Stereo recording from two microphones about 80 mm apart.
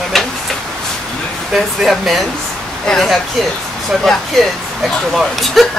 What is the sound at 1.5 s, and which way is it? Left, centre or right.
Speech, centre.